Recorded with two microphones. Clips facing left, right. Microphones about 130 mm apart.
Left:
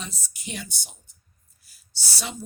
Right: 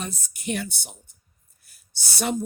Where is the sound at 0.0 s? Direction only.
55° right (ahead or behind).